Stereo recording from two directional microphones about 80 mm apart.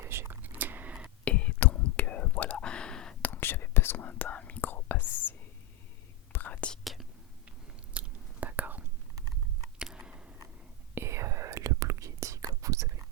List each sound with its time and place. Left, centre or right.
0.0 s whispering: right
1.2 s whispering: centre
3.2 s whispering: left
6.3 s whispering: left
6.8 s whispering: centre
7.9 s whispering: centre
9.7 s a sound: centre
10.9 s whispering: right